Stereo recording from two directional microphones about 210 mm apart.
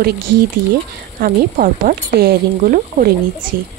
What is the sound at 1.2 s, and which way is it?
Speech, 40° right (ahead or behind).